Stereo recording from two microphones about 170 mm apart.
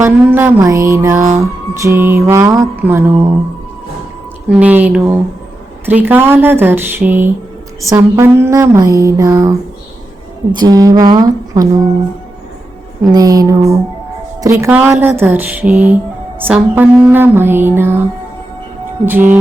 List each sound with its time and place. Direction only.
0.0 s music: 15° right (ahead or behind)
4.4 s music: 5° right (ahead or behind)
10.5 s speech: 25° right (ahead or behind)
13.1 s speech: 20° right (ahead or behind)
14.4 s music: 15° right (ahead or behind)
19.0 s music: 10° right (ahead or behind)